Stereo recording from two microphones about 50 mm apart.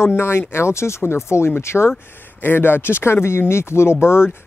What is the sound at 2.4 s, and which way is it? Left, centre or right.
Speech, left.